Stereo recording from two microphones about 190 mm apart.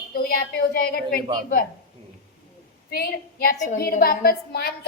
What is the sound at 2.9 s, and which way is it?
A woman's voice, 55° left (ahead or behind).